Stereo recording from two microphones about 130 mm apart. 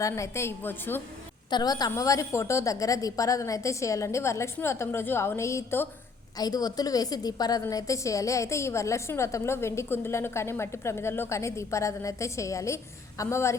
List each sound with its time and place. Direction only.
0.0 s a woman's voice: 20° left (ahead or behind)
1.5 s a woman's voice: 30° left (ahead or behind)
6.3 s a woman's voice: 30° left (ahead or behind)